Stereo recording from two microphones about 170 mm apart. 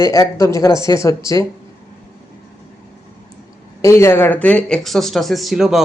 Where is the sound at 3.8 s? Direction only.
15° left (ahead or behind).